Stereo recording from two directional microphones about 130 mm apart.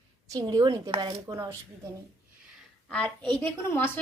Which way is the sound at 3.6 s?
15° left (ahead or behind).